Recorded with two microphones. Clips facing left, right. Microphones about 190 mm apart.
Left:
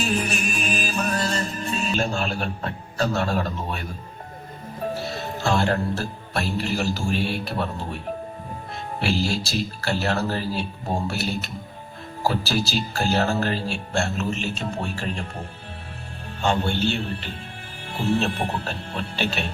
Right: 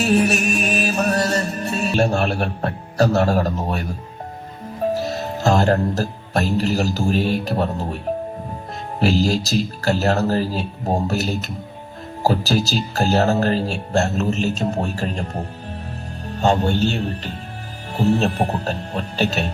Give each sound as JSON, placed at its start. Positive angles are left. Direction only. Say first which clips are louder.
{"t": 0.0, "sound": "music", "louder": "right 8 dB", "side_deg": -40}
{"t": 2.0, "sound": "music", "louder": "right 6 dB", "side_deg": -65}
{"t": 2.6, "sound": "speech", "louder": "right 7 dB", "side_deg": -40}
{"t": 4.9, "sound": "speech", "louder": "right 6 dB", "side_deg": -40}